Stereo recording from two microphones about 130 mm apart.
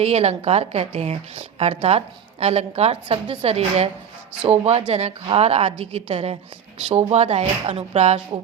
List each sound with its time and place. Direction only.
0.0 s a woman's voice: 55° right (ahead or behind)